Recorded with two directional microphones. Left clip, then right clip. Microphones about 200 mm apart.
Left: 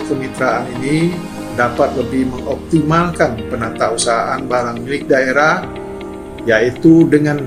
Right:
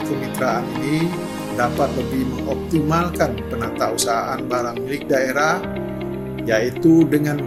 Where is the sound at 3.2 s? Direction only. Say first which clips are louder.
Left 5 dB; 55° right (ahead or behind).